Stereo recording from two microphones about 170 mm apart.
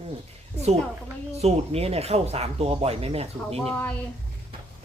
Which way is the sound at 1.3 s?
40° right (ahead or behind).